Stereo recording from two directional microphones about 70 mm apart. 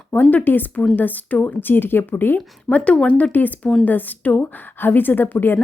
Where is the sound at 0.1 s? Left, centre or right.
Left.